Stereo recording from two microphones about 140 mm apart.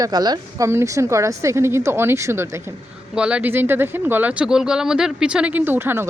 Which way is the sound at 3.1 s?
10° right (ahead or behind).